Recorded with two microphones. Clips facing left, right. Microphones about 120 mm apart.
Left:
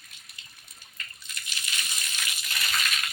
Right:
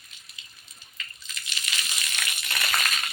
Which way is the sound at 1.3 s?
90° right.